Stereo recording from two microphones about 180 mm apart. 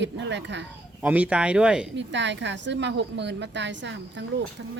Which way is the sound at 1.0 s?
10° right (ahead or behind).